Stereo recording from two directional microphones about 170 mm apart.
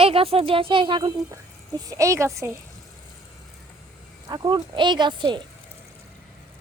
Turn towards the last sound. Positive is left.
turn(degrees=-30)  # may be behind; listen again after turning